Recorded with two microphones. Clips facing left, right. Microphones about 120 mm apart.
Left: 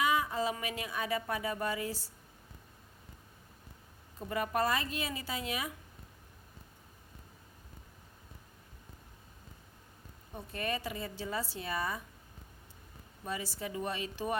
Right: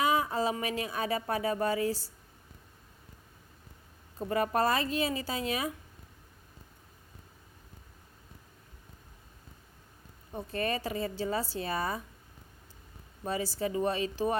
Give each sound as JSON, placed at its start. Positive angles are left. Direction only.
{"t": 0.0, "sound": "speech", "side_deg": -35}
{"t": 4.3, "sound": "speech", "side_deg": -35}
{"t": 10.3, "sound": "speech", "side_deg": -35}
{"t": 13.2, "sound": "speech", "side_deg": -35}